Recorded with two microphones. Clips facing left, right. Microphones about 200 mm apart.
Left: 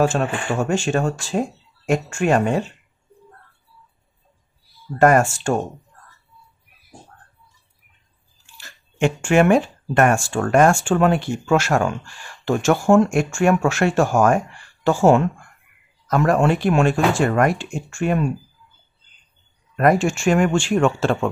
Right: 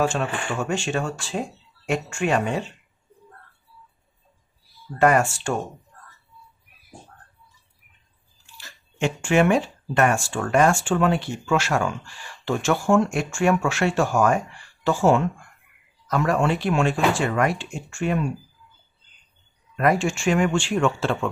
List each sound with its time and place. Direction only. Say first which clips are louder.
0.0 s speech: left 4 dB; 40° left (ahead or behind)
4.9 s speech: left 4 dB; 45° left (ahead or behind)
8.5 s speech: left 5 dB; 50° left (ahead or behind)
19.8 s speech: left 4 dB; 45° left (ahead or behind)